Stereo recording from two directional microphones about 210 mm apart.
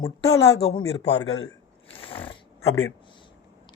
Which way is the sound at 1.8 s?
25° left (ahead or behind).